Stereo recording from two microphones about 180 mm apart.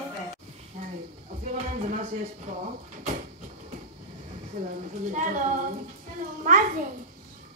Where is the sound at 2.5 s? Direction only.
40° right (ahead or behind).